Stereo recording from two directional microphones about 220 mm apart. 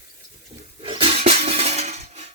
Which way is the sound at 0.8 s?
25° right (ahead or behind).